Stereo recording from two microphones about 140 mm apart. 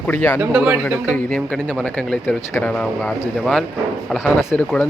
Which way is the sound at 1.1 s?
10° left (ahead or behind).